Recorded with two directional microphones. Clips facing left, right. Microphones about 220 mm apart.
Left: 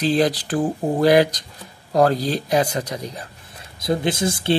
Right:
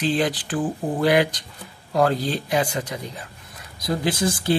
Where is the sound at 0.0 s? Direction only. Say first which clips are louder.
Left 4 dB; 40° left (ahead or behind).